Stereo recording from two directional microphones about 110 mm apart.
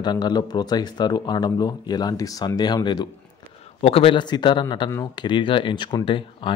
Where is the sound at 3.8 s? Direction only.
55° left (ahead or behind).